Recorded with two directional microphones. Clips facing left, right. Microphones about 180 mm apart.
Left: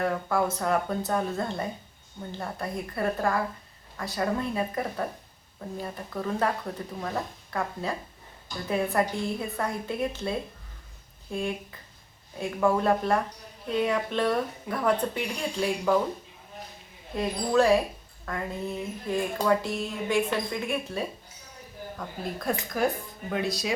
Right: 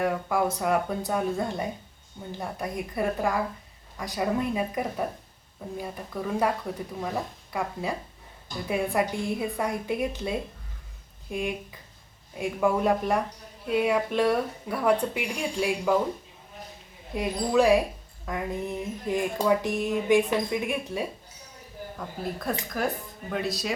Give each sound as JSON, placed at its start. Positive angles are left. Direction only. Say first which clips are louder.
{"t": 0.0, "sound": "speech", "louder": "right 1 dB", "side_deg": -10}
{"t": 17.2, "sound": "speech", "louder": "even", "side_deg": -15}
{"t": 21.9, "sound": "a woman's voice", "louder": "right 1 dB", "side_deg": 0}